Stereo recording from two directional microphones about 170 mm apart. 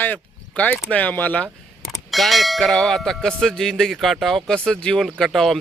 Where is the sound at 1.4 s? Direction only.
Centre (ahead or behind).